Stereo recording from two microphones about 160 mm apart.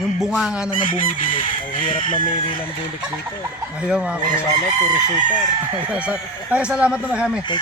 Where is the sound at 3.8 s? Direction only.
5° right (ahead or behind).